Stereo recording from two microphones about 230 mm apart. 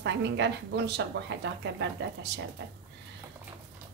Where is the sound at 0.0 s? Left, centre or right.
Right.